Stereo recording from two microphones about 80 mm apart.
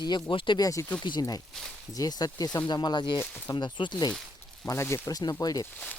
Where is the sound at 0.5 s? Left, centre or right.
Left.